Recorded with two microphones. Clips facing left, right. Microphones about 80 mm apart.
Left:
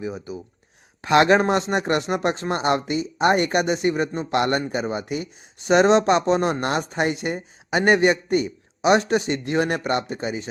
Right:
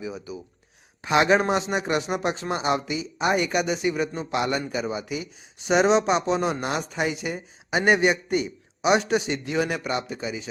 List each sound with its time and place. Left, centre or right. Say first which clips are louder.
1.0 s a man's voice: left 3 dB; left
4.3 s a man's voice: left 4 dB; left